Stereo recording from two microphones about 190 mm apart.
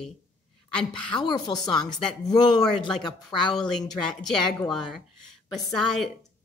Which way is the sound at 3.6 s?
5° left (ahead or behind).